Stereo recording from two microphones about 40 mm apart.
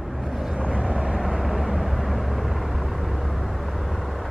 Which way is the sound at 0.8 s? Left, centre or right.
Centre.